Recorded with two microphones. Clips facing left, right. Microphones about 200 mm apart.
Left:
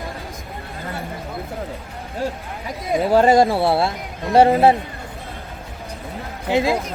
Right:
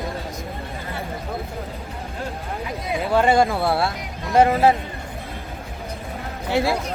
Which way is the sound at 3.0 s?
40° left (ahead or behind).